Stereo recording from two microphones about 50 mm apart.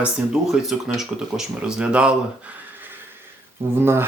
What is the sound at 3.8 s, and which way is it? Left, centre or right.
Speech, right.